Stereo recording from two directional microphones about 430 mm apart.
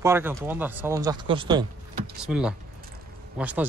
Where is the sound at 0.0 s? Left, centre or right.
Centre.